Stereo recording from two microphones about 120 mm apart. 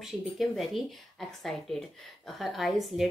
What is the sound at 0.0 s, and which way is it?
A woman's voice, centre (ahead or behind).